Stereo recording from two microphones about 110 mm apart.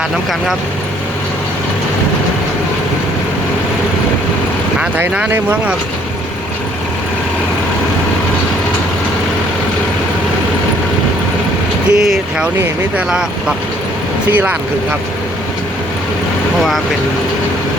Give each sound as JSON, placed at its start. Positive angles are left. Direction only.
{"t": 4.8, "sound": "speech", "side_deg": -10}
{"t": 11.9, "sound": "speech", "side_deg": -5}
{"t": 14.3, "sound": "speech", "side_deg": -15}